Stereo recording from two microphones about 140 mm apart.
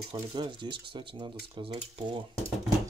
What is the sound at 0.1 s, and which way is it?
Speech, 35° right (ahead or behind).